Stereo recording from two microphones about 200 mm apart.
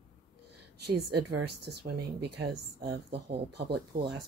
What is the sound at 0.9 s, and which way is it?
A woman's voice, 55° right (ahead or behind).